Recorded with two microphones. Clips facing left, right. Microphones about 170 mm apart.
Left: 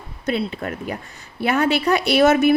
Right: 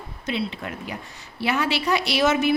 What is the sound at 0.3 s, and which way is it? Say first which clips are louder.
A woman's voice: left 5 dB; 45° left (ahead or behind).